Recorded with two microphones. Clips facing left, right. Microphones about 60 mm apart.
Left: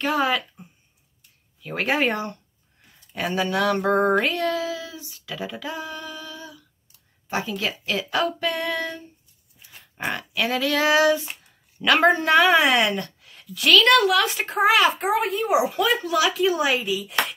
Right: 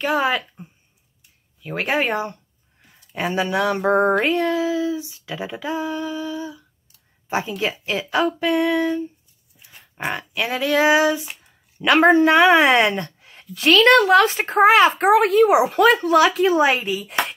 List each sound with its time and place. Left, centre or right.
0.0 s speech: centre
0.6 s a sound: right
1.6 s speech: centre
3.2 s speech: centre
4.2 s female singing: right
9.6 s livestock: centre
10.3 s speech: centre
11.9 s a woman's voice: right
15.0 s speech: right
15.5 s a woman's voice: right